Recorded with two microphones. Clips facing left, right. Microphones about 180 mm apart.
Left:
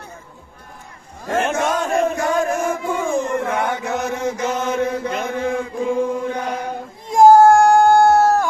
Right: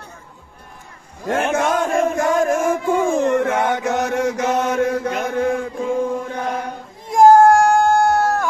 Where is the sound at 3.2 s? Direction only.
75° right (ahead or behind).